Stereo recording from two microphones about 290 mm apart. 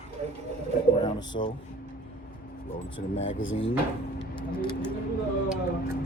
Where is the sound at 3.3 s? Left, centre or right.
Left.